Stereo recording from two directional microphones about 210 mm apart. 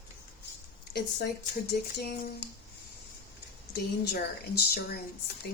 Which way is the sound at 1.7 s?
50° left (ahead or behind).